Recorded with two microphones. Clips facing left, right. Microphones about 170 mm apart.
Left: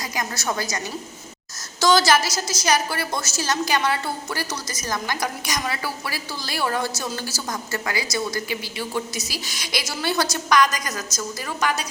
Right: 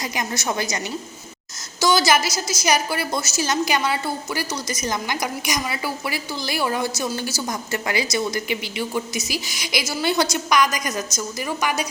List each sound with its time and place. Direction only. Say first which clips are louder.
0.0 s a woman's voice: right 2 dB; 20° right (ahead or behind)
1.8 s a woman's voice: even; 10° right (ahead or behind)